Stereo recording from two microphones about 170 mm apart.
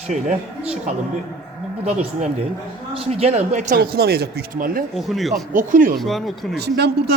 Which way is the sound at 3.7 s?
65° right (ahead or behind).